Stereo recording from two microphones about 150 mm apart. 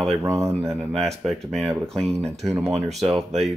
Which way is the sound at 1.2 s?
Centre (ahead or behind).